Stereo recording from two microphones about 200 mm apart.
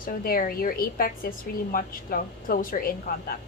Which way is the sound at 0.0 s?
45° left (ahead or behind).